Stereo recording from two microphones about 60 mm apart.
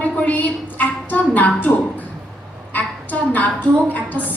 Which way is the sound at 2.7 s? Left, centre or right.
Left.